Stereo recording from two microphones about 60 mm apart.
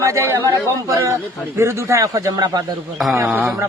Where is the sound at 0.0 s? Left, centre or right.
Right.